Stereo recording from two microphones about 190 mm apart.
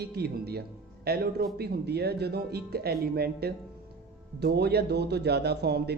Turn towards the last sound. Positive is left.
turn(degrees=-60)  # may be behind; listen again after turning